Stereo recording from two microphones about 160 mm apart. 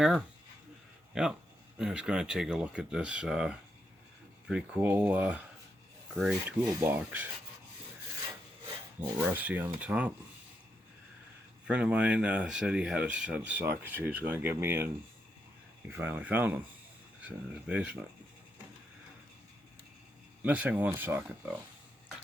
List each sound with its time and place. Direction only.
0.0 s speech: centre (ahead or behind)
9.0 s speech: 10° right (ahead or behind)
11.7 s speech: 10° right (ahead or behind)
16.0 s speech: 10° right (ahead or behind)
20.4 s speech: 10° right (ahead or behind)